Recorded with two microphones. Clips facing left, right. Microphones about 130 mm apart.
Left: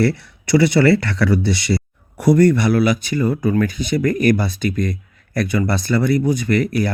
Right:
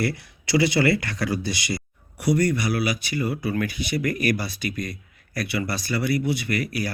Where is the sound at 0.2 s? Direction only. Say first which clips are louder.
Left 6 dB; 60° left (ahead or behind).